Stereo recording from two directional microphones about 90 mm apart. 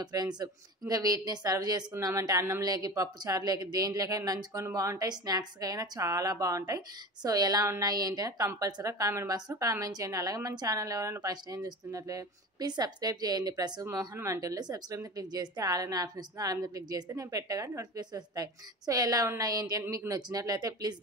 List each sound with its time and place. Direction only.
0.0 s a woman's voice: 50° right (ahead or behind)
14.1 s a woman's voice: 35° right (ahead or behind)